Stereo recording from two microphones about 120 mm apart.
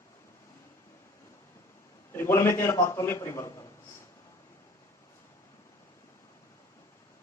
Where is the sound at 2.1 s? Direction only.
20° left (ahead or behind).